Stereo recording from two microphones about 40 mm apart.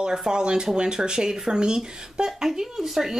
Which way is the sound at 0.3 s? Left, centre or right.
Right.